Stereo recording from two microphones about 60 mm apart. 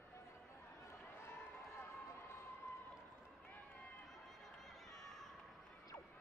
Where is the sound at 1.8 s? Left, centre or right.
Left.